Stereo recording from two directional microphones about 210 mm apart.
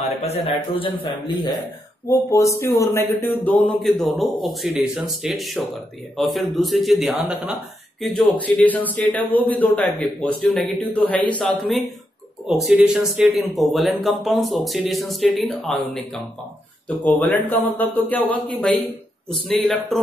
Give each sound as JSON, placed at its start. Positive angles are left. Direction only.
{"t": 0.2, "sound": "a man's voice", "side_deg": 25}